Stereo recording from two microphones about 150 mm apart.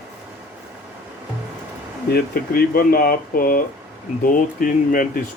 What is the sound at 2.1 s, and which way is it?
Speech, 80° left.